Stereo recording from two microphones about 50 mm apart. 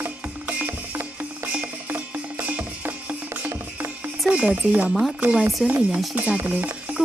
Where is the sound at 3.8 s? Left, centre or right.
Right.